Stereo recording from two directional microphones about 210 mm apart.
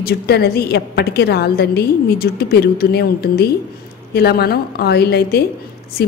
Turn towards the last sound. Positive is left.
turn(degrees=50)  # may be behind; listen again after turning